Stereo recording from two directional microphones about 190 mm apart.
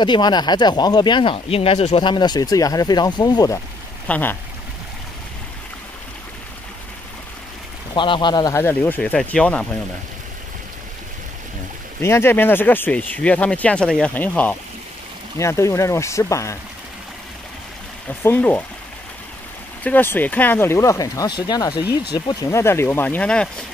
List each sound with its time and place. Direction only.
0.0 s speech: 25° left (ahead or behind)
7.9 s speech: 25° left (ahead or behind); by 9.7 s 5° left (ahead or behind)
12.0 s speech: 15° left (ahead or behind)
18.2 s speech: 10° left (ahead or behind)
19.8 s speech: 10° left (ahead or behind)